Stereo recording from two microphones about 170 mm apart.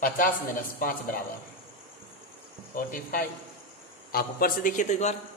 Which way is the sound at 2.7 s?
55° left (ahead or behind).